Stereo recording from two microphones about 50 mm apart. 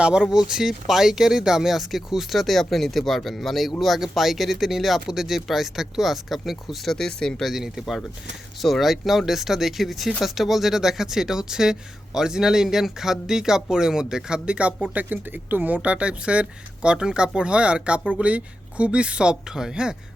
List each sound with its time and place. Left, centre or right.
0.0 s speech: centre
6.9 s speech: centre
7.4 s speech: centre